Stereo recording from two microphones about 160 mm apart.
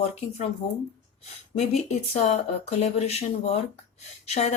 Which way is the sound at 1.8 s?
40° left (ahead or behind).